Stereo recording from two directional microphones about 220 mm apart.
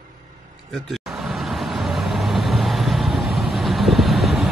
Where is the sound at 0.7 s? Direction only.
Centre (ahead or behind).